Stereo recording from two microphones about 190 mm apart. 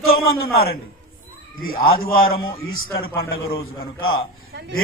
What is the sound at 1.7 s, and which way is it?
A man's voice, 50° left (ahead or behind).